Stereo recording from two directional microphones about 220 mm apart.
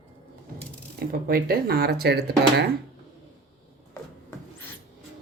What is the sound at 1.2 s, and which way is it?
Speech, 45° right (ahead or behind).